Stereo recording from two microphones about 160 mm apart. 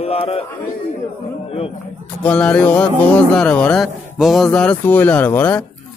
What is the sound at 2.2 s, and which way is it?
Speech, 10° left (ahead or behind).